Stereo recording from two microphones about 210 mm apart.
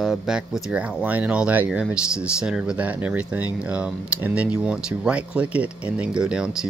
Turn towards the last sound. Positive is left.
turn(degrees=-5)  # may be behind; listen again after turning